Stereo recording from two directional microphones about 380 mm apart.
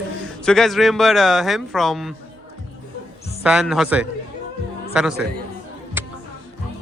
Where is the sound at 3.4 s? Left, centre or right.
Centre.